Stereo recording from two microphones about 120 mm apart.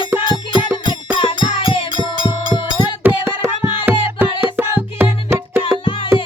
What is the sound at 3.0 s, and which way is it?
Music, 15° right (ahead or behind).